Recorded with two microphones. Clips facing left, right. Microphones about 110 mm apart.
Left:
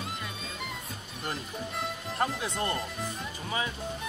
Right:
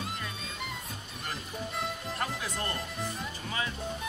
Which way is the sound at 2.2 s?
30° left (ahead or behind).